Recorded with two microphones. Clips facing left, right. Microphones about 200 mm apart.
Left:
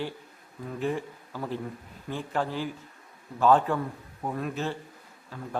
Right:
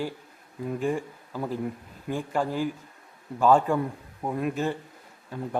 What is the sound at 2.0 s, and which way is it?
Speech, 10° right (ahead or behind).